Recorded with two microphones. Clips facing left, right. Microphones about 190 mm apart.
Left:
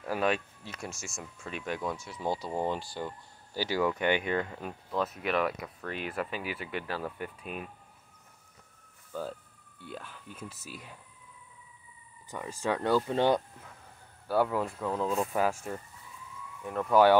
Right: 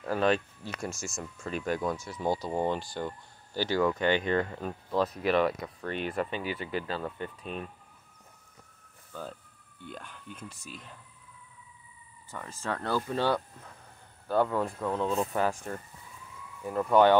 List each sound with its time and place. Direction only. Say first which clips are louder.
0.0 s speech: right 3 dB; 5° left (ahead or behind)
0.8 s speech: right 4 dB; 45° right (ahead or behind)
1.1 s speech: right 5 dB; 5° left (ahead or behind)
6.7 s speech: right 2 dB; 30° right (ahead or behind)
7.0 s speech: right 1 dB; 5° left (ahead or behind)
9.8 s speech: left 1 dB; 5° left (ahead or behind)
12.3 s speech: left 4 dB; 15° left (ahead or behind)
14.2 s speech: right 1 dB; 5° left (ahead or behind)